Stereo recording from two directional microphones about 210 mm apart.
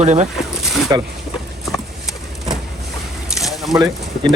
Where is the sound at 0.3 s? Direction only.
Centre (ahead or behind).